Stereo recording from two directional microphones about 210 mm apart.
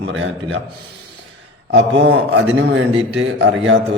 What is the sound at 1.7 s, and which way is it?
A man's voice, 60° right (ahead or behind).